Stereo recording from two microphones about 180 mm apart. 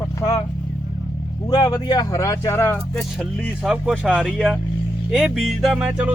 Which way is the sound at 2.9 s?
Centre (ahead or behind).